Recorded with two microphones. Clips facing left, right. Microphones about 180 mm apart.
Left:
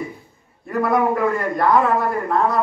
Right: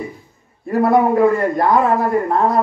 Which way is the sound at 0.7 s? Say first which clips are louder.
Right 5 dB; 30° right (ahead or behind).